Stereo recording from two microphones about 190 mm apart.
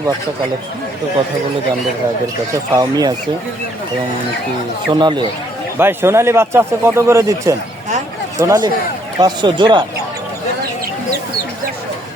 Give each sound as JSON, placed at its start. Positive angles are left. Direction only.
{"t": 2.5, "sound": "speech", "side_deg": -20}
{"t": 4.9, "sound": "speech", "side_deg": -25}
{"t": 5.7, "sound": "speech", "side_deg": -10}